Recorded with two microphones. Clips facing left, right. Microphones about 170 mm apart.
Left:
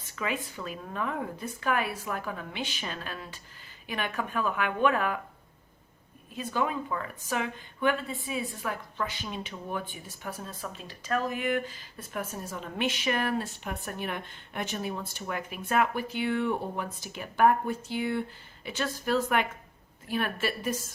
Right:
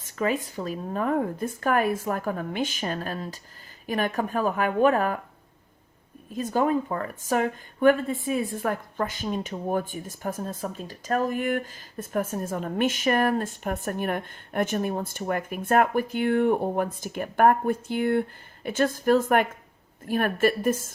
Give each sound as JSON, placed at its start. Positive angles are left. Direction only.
{"t": 0.0, "sound": "a woman's voice", "side_deg": -45}
{"t": 6.3, "sound": "a woman's voice", "side_deg": -45}